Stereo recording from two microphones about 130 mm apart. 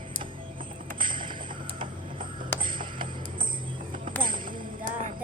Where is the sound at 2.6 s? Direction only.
40° right (ahead or behind).